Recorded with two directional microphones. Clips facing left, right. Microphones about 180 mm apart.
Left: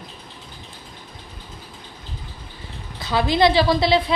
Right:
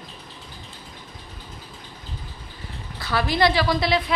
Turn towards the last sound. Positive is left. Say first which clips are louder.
# left 4 dB
turn(degrees=30)  # may be behind; listen again after turning